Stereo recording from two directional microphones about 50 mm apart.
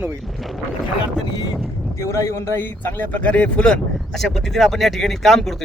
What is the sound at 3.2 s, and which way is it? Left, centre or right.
Speech, left.